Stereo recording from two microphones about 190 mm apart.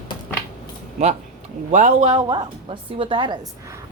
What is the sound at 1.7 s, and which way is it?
A woman's voice, 35° right (ahead or behind).